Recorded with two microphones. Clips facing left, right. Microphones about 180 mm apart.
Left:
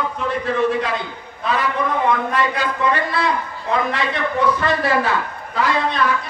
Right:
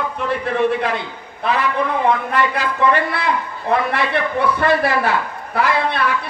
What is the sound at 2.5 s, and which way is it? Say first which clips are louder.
A man's voice: right 3 dB; 60° right (ahead or behind).